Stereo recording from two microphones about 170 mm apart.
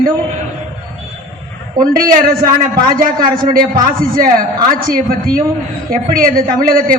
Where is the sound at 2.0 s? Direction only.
55° right (ahead or behind).